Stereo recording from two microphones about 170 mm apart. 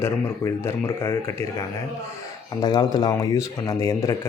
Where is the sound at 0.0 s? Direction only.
15° left (ahead or behind).